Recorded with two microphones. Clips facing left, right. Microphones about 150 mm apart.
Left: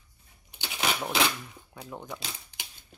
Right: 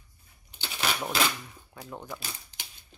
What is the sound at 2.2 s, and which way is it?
Typewriter, 15° left (ahead or behind).